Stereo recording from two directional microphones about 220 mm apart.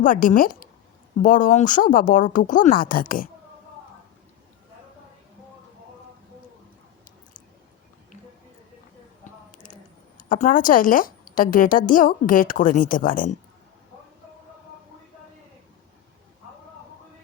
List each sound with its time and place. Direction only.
0.0 s a woman's voice: 40° left (ahead or behind)
10.2 s a woman's voice: 35° left (ahead or behind)